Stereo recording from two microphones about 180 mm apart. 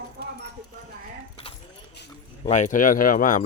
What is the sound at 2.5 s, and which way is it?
Speech, 45° left (ahead or behind).